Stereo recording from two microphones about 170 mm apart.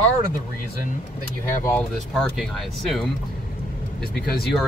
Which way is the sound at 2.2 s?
Centre (ahead or behind).